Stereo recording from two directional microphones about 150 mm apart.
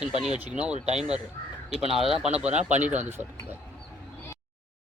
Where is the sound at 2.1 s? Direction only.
45° right (ahead or behind).